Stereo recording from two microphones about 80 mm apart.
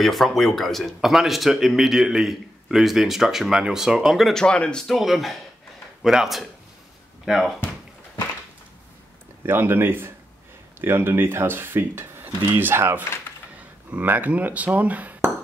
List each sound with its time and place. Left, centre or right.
0.0 s speech: centre
4.3 s speech: centre
9.5 s speech: right